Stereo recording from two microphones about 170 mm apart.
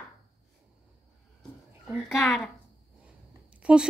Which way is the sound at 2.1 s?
Centre (ahead or behind).